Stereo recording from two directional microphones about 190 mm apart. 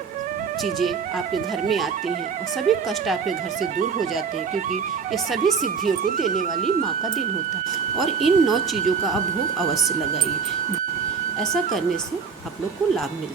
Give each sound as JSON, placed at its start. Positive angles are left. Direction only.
{"t": 2.7, "sound": "speech", "side_deg": 0}
{"t": 3.2, "sound": "speech", "side_deg": -40}
{"t": 5.8, "sound": "speech", "side_deg": -50}
{"t": 6.1, "sound": "speech", "side_deg": 40}
{"t": 7.9, "sound": "speech", "side_deg": 0}
{"t": 11.3, "sound": "speech", "side_deg": 0}